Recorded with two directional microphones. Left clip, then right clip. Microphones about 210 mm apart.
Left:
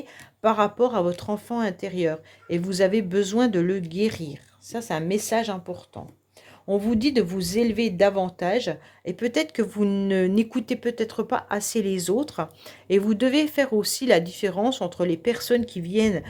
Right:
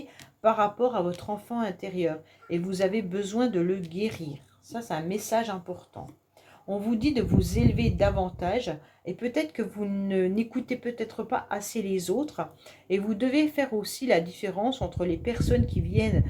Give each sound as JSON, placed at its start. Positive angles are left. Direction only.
{"t": 0.4, "sound": "speech", "side_deg": 40}